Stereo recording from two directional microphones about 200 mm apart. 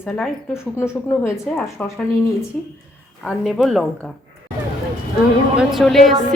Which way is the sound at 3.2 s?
Centre (ahead or behind).